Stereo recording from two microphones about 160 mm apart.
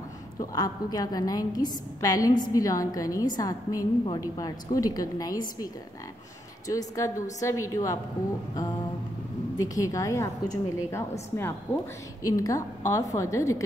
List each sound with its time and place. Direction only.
0.4 s a woman's voice: 25° left (ahead or behind)
6.7 s a woman's voice: 20° left (ahead or behind)
9.6 s a woman's voice: 20° left (ahead or behind)
12.2 s a woman's voice: 20° left (ahead or behind)